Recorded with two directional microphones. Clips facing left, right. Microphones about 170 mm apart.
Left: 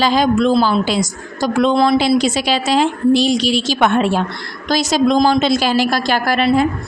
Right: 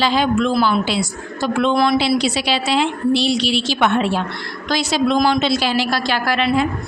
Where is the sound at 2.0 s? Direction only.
45° left (ahead or behind).